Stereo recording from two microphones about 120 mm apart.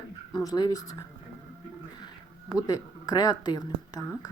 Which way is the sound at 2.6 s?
35° left (ahead or behind).